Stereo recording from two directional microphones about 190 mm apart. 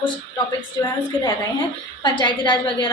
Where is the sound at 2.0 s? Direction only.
25° left (ahead or behind).